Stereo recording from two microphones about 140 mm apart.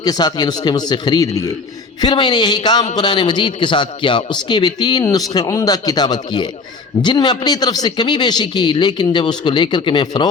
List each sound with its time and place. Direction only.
0.0 s a man's voice: 30° left (ahead or behind)